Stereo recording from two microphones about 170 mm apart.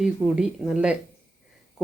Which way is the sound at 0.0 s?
5° right (ahead or behind).